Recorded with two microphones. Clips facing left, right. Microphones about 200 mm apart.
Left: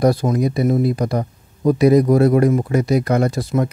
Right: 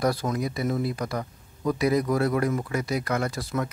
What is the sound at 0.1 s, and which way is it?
Speech, 25° left (ahead or behind).